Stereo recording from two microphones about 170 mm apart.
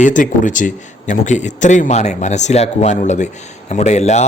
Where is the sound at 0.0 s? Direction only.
50° left (ahead or behind).